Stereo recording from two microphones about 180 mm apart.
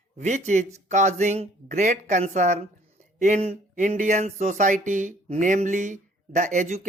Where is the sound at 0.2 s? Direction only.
40° right (ahead or behind).